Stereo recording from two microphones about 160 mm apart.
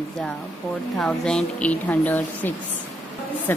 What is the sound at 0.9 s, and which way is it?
A woman's voice, 5° left (ahead or behind).